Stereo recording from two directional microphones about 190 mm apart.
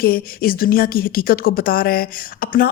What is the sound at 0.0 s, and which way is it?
Speech, 50° left (ahead or behind).